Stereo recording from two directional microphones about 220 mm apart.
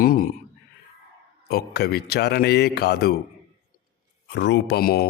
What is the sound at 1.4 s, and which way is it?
A man's voice, 45° left (ahead or behind).